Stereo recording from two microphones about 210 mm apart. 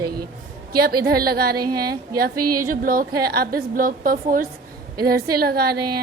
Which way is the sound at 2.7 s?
40° right (ahead or behind).